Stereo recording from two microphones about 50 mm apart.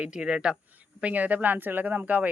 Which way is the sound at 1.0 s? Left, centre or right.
Right.